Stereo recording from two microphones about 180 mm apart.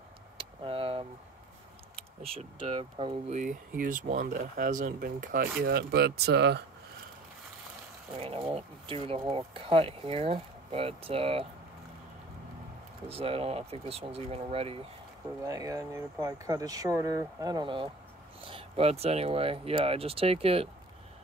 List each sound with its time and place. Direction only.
0.4 s a sound: 30° right (ahead or behind)
2.0 s speech: 35° right (ahead or behind)
3.3 s speech: 45° right (ahead or behind); by 6.6 s 70° right (ahead or behind)
8.2 s speech: 30° right (ahead or behind)
13.1 s speech: 30° right (ahead or behind)
15.4 s speech: 20° right (ahead or behind)